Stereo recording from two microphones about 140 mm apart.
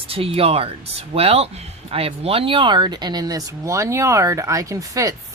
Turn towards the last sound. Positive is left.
turn(degrees=-25)  # may be behind; listen again after turning